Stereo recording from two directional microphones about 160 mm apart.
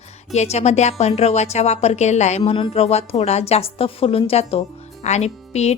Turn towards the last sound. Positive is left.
turn(degrees=40)  # may be behind; listen again after turning